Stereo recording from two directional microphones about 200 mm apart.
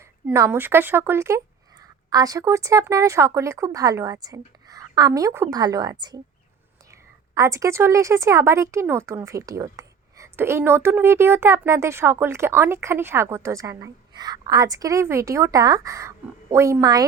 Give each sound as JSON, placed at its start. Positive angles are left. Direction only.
{"t": 0.3, "sound": "speech", "side_deg": -10}
{"t": 7.3, "sound": "speech", "side_deg": -15}